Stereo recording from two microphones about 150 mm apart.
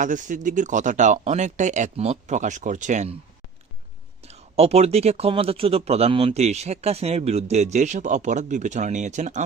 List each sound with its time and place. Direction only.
0.0 s speech: 60° right (ahead or behind)
4.3 s speech: 45° right (ahead or behind)